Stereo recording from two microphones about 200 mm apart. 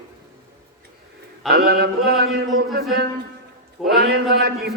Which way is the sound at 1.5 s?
50° right (ahead or behind).